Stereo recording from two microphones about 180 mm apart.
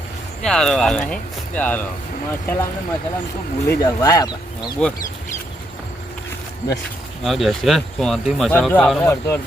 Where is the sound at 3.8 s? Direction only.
20° left (ahead or behind).